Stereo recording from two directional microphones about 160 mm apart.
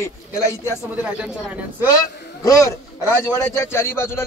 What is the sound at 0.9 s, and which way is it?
Speech, 5° right (ahead or behind).